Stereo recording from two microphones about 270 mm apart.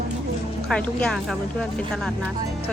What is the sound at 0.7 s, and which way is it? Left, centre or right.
Speech, centre.